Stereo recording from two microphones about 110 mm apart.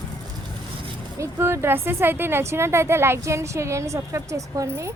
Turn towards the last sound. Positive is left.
turn(degrees=-30)  # may be behind; listen again after turning